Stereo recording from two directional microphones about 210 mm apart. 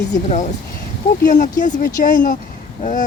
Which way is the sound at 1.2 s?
40° left (ahead or behind).